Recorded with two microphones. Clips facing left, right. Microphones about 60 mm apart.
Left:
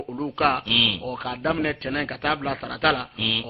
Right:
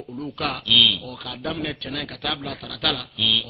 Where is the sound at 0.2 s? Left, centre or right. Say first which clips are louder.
Left 6 dB; left.